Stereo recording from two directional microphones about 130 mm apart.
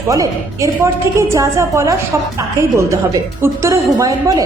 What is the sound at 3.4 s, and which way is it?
A woman's voice, 20° right (ahead or behind).